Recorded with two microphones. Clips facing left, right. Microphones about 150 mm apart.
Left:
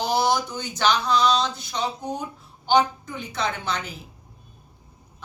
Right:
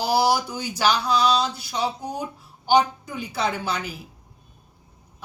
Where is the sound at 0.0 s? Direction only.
10° right (ahead or behind).